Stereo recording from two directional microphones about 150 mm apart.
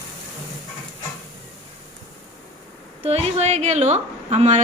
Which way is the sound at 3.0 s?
45° right (ahead or behind).